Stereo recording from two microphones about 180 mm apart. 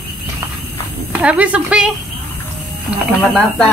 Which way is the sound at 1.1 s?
5° right (ahead or behind).